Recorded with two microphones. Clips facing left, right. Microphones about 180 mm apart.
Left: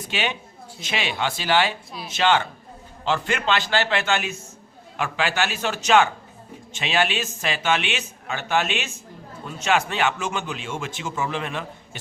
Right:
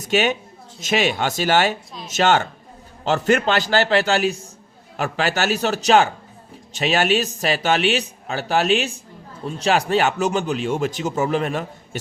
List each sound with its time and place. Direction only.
0.1 s a man's voice: 45° right (ahead or behind)